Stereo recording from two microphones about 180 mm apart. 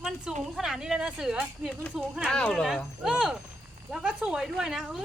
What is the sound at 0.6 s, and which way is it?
A woman's voice, 5° right (ahead or behind).